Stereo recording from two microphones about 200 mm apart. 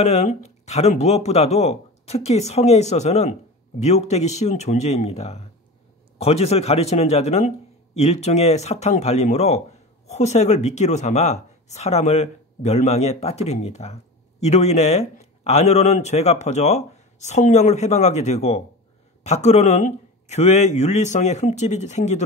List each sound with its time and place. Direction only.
0.0 s a man's voice: 35° left (ahead or behind)